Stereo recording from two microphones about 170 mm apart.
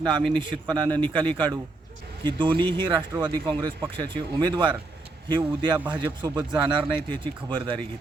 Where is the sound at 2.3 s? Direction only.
30° right (ahead or behind).